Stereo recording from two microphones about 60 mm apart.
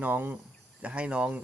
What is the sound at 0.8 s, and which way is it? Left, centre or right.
Speech, centre.